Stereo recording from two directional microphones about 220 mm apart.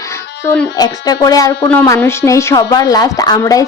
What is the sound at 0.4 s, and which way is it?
A woman's voice, 15° left (ahead or behind).